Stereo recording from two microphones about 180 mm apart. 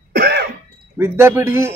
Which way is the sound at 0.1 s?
65° right (ahead or behind).